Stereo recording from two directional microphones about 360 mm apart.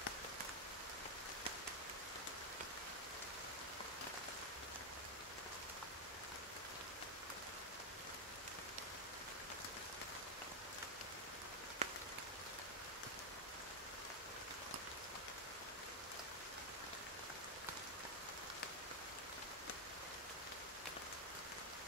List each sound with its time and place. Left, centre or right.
11.8 s rain on surface: centre